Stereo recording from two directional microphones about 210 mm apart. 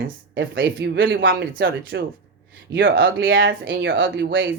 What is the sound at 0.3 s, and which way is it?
Speech, 60° right (ahead or behind).